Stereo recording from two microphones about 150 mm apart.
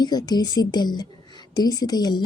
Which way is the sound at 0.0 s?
25° left (ahead or behind).